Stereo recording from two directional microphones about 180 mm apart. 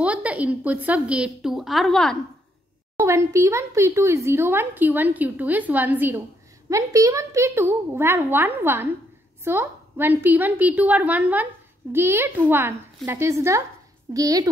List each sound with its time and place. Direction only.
0.0 s speech: 5° right (ahead or behind)
3.0 s a woman's voice: 15° right (ahead or behind)